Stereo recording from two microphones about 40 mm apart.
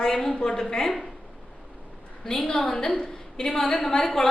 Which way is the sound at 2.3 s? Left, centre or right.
Centre.